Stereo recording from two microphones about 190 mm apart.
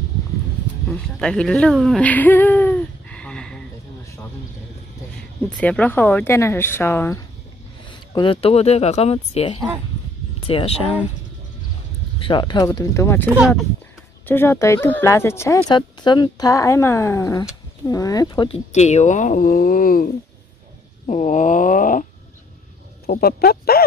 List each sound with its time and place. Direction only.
0.8 s speech: 5° left (ahead or behind)
5.4 s speech: 5° left (ahead or behind)
8.1 s speech: 25° left (ahead or behind)
12.2 s speech: 25° left (ahead or behind)
18.7 s a woman's voice: 35° left (ahead or behind)
21.1 s speech: 40° left (ahead or behind)
23.0 s speech: 55° left (ahead or behind)